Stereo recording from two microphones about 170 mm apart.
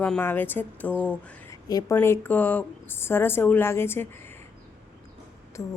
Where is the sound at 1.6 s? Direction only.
20° left (ahead or behind).